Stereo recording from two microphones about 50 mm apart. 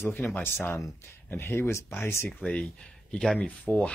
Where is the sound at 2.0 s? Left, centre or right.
Left.